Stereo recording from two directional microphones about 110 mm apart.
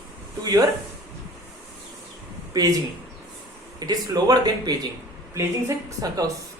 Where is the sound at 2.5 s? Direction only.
35° right (ahead or behind).